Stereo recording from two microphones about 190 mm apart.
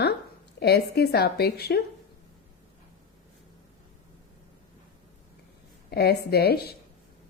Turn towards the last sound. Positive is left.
turn(degrees=55)  # may be behind; listen again after turning